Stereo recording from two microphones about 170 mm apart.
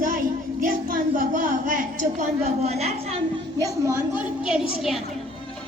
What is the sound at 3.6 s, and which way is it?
A woman's voice, 15° right (ahead or behind).